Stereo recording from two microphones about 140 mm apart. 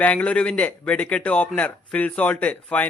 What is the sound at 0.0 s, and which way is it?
A man's voice, 10° left (ahead or behind).